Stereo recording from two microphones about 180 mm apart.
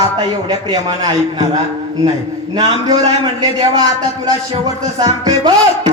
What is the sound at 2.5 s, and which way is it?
A man's voice, 25° right (ahead or behind).